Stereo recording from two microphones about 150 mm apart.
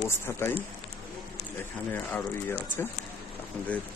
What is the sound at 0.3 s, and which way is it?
Speech, 15° left (ahead or behind).